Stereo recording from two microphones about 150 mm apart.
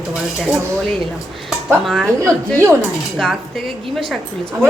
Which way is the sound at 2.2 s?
20° right (ahead or behind).